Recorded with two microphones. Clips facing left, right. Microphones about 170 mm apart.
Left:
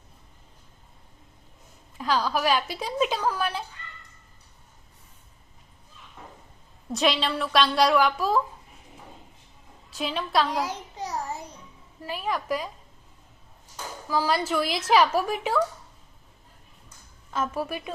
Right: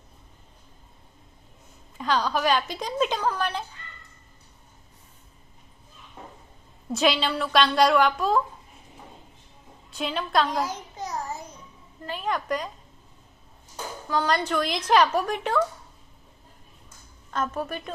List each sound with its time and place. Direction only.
2.0 s a woman's voice: 5° left (ahead or behind)
6.9 s a woman's voice: centre (ahead or behind)
9.9 s a woman's voice: centre (ahead or behind)
11.0 s a sound: 35° left (ahead or behind)
12.0 s a woman's voice: 5° left (ahead or behind)
14.1 s a woman's voice: 5° left (ahead or behind)
17.3 s a woman's voice: 5° left (ahead or behind)